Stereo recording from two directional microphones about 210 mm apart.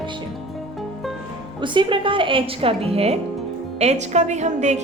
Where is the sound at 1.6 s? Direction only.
20° right (ahead or behind).